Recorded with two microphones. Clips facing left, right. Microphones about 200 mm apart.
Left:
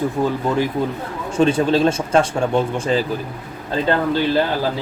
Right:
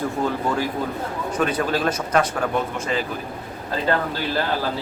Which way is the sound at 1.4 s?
25° left (ahead or behind).